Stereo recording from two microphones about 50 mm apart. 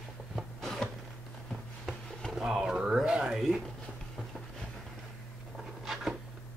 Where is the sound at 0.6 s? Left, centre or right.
Centre.